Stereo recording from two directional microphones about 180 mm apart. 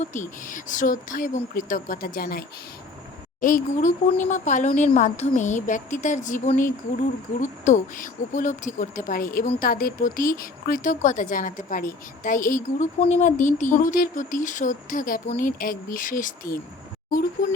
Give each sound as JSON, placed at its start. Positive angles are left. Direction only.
{"t": 0.0, "sound": "speech", "side_deg": 45}
{"t": 3.4, "sound": "speech", "side_deg": 45}